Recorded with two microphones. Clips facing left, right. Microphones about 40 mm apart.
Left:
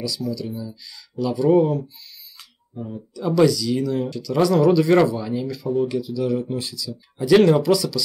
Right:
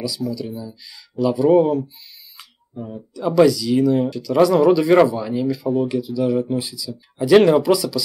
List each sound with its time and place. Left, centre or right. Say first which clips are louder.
0.0 s speech: right 2 dB; centre
6.6 s speech: right 1 dB; centre